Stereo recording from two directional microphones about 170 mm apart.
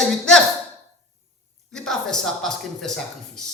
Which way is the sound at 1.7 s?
5° left (ahead or behind).